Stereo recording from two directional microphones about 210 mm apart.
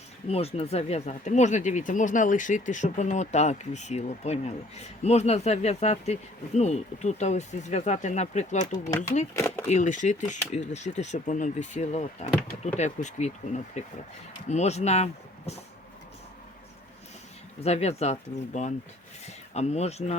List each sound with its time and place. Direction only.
0.3 s speech: 30° left (ahead or behind)
9.3 s speech: 10° left (ahead or behind)
9.6 s speech: 35° left (ahead or behind)
17.6 s speech: 30° left (ahead or behind)